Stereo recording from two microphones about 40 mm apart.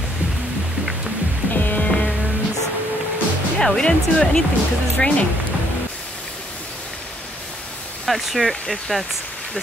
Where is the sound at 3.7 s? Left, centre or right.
Centre.